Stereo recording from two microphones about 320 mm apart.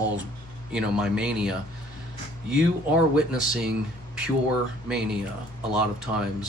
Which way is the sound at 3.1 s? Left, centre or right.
Centre.